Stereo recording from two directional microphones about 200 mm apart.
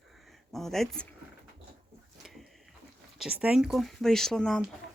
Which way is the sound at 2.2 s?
Centre (ahead or behind).